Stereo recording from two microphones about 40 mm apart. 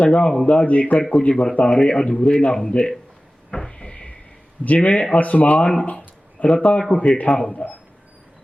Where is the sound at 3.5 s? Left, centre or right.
Centre.